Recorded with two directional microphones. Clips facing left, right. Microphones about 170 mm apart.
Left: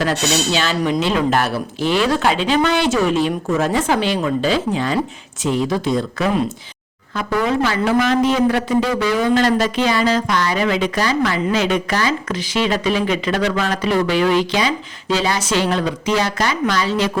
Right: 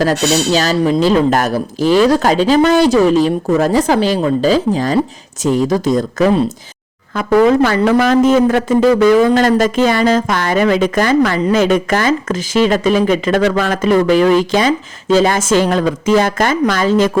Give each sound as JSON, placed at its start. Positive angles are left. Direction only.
{"t": 0.0, "sound": "a man's voice", "side_deg": -40}